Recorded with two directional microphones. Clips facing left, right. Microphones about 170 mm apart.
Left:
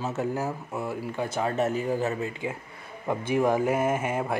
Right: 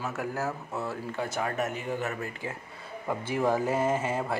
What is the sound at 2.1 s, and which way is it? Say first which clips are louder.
Speech: left 5 dB; 20° left (ahead or behind).